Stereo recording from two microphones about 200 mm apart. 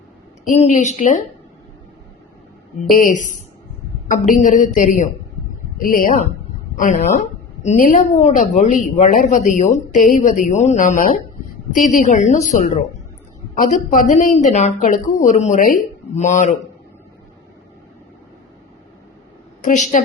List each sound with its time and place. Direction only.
0.5 s speech: 35° left (ahead or behind)
2.9 s speech: 40° left (ahead or behind)
4.4 s speech: 40° left (ahead or behind)
19.6 s speech: 40° left (ahead or behind)